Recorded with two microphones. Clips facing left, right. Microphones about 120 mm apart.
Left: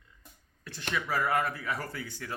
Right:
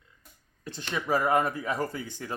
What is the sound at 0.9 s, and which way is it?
Speech, 25° right (ahead or behind).